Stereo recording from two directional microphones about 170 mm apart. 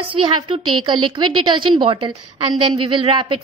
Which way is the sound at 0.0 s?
30° right (ahead or behind).